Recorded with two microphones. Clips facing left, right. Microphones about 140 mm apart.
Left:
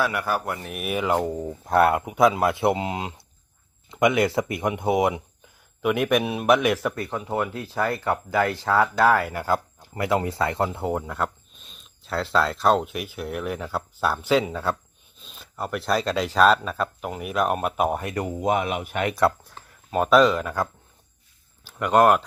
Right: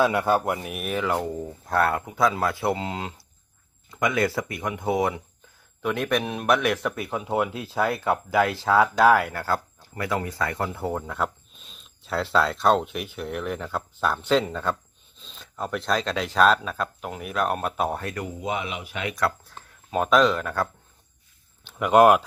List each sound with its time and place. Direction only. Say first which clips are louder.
0.0 s speech: right 4 dB; 25° right (ahead or behind)
0.6 s speech: even; 5° right (ahead or behind)
0.9 s speech: left 3 dB; 15° left (ahead or behind)
6.9 s speech: even; centre (ahead or behind)
7.2 s speech: right 4 dB; 15° right (ahead or behind)
9.3 s speech: left 2 dB; 15° left (ahead or behind)
11.0 s speech: even; centre (ahead or behind)
18.1 s speech: left 6 dB; 45° left (ahead or behind)
19.5 s speech: even; 5° left (ahead or behind)
21.7 s speech: right 2 dB; 5° right (ahead or behind)